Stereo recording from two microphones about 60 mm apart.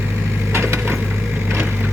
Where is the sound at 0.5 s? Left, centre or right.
Right.